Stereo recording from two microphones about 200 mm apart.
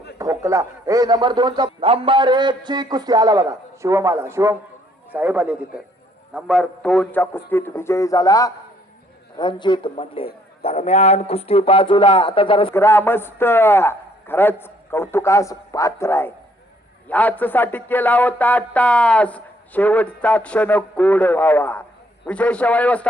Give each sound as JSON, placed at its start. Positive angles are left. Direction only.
{"t": 0.2, "sound": "a man's voice", "side_deg": -15}
{"t": 12.7, "sound": "speech", "side_deg": 10}